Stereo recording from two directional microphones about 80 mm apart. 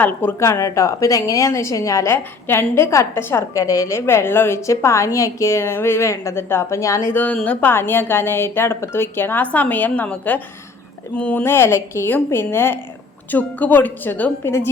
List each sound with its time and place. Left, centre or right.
0.0 s a woman's voice: left
0.3 s a woman's voice: left
2.0 s a woman's voice: left
3.6 s a woman's voice: left
7.1 s a woman's voice: left
11.4 s a woman's voice: left